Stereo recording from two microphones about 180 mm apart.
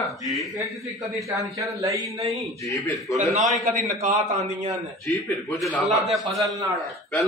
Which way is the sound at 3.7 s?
45° right (ahead or behind).